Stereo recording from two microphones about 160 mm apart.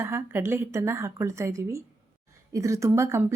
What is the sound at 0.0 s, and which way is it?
A woman's voice, 15° right (ahead or behind).